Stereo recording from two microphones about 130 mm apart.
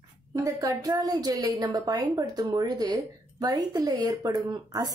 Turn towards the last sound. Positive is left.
turn(degrees=-30)  # may be behind; listen again after turning